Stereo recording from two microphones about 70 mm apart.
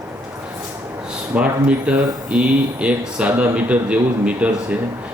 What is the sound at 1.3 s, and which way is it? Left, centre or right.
Speech, centre.